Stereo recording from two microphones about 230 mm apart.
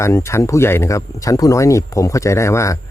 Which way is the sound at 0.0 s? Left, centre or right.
Centre.